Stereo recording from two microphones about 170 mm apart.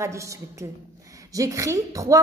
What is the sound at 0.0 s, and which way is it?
A woman's voice, 15° right (ahead or behind).